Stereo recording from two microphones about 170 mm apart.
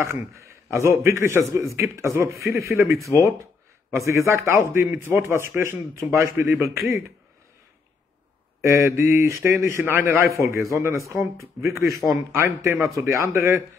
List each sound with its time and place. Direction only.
0.0 s a man's voice: 15° right (ahead or behind)
8.6 s a man's voice: 15° right (ahead or behind)